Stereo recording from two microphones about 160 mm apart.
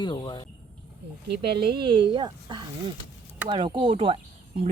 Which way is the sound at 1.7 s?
30° right (ahead or behind).